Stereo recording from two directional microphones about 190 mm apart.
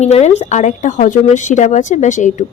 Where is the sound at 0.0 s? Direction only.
35° left (ahead or behind).